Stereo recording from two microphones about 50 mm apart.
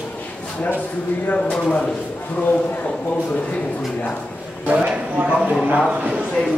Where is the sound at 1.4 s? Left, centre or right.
Centre.